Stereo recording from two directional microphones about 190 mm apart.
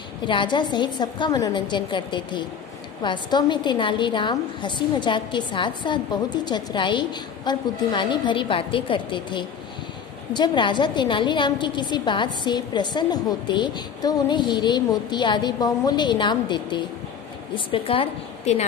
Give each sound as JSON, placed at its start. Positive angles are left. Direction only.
{"t": 0.3, "sound": "a woman's voice", "side_deg": 25}